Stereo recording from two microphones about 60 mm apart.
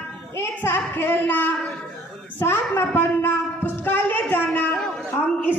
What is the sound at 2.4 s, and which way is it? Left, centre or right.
Speech, left.